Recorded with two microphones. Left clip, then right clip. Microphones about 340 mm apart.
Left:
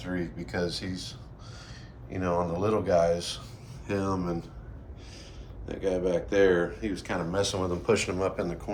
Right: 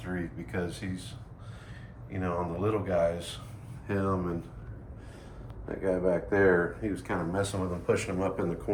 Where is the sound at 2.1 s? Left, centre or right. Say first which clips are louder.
Left 4 dB; centre.